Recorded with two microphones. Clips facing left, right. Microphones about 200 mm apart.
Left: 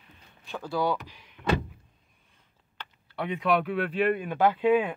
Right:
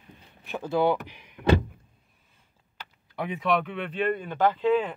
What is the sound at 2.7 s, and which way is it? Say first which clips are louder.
Speech: right 1 dB; 10° right (ahead or behind).